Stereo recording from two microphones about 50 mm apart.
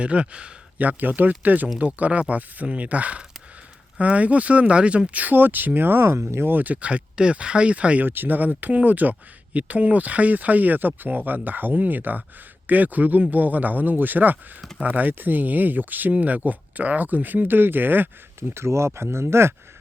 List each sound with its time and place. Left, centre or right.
0.0 s speech: right
0.8 s speech: right
6.1 s speech: right
6.4 s speech: right
8.0 s speech: right
18.3 s speech: right